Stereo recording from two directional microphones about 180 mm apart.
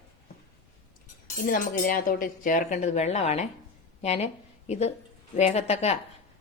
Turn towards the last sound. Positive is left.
turn(degrees=35)  # may be behind; listen again after turning